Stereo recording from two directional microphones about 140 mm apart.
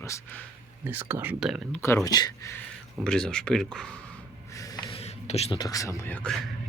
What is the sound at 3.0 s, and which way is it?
Speech, 5° left (ahead or behind).